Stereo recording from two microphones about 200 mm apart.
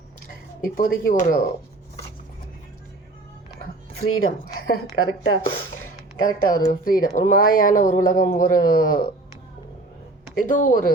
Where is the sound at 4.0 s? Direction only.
90° left.